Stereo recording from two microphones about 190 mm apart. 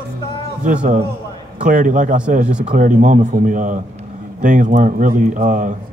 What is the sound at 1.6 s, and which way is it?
A man's voice, 45° right (ahead or behind).